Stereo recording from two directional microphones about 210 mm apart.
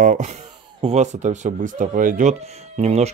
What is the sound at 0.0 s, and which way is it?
Speech, 35° right (ahead or behind).